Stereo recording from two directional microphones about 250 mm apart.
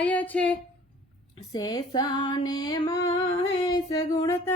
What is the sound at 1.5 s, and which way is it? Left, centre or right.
Music, centre.